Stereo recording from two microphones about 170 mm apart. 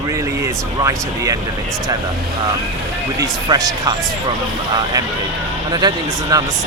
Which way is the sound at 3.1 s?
20° right (ahead or behind).